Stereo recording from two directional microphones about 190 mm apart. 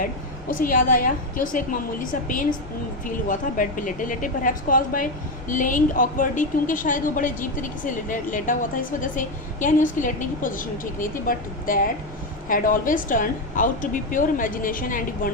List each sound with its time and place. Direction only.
0.5 s a woman's voice: 45° left (ahead or behind)